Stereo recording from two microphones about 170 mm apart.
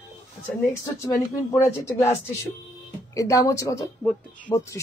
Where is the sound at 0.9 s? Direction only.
15° left (ahead or behind).